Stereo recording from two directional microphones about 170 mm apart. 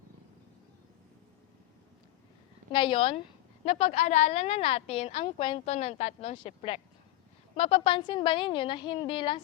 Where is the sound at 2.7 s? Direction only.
30° left (ahead or behind).